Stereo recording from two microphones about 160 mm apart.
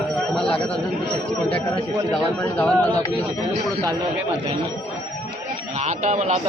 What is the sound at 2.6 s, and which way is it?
Speech, 10° left (ahead or behind).